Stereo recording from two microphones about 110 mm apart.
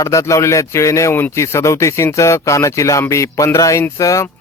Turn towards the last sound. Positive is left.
turn(degrees=30)  # may be behind; listen again after turning